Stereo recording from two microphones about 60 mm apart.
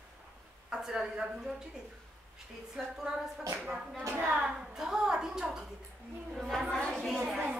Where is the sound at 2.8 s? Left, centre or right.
Centre.